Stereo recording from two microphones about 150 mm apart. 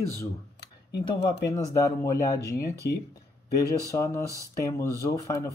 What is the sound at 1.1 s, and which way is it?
Speech, 25° left (ahead or behind).